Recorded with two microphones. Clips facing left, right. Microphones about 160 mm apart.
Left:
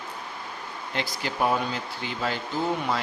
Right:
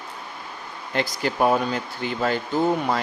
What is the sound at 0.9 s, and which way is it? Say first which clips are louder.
Speech: right 6 dB; 50° right (ahead or behind).